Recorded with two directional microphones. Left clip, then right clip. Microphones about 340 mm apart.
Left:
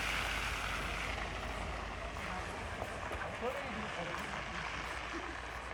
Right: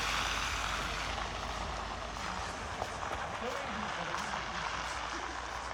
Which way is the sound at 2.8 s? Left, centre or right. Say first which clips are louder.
Right 5 dB; centre.